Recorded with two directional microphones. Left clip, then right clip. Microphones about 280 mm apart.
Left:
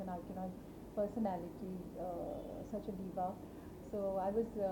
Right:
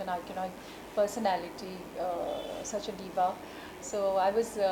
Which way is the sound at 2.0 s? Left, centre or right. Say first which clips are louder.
Right 10 dB; centre.